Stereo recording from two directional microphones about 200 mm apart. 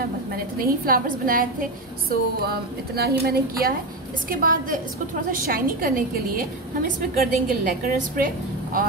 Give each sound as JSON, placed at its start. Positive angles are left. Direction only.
{"t": 0.7, "sound": "a woman's voice", "side_deg": -45}